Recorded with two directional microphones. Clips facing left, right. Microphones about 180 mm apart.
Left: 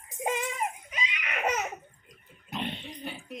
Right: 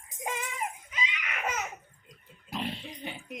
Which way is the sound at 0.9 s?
25° left (ahead or behind).